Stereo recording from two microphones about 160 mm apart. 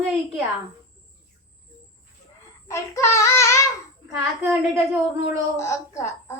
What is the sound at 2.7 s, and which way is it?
Child singing, 20° left (ahead or behind).